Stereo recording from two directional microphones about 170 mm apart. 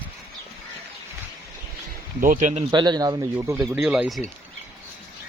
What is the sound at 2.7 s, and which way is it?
Speech, 25° right (ahead or behind).